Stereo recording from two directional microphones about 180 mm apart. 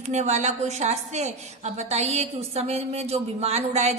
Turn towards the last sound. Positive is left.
turn(degrees=-40)  # may be behind; listen again after turning